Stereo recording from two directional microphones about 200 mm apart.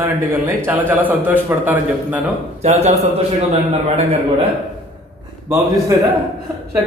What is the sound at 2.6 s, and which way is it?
A man's voice, 35° right (ahead or behind).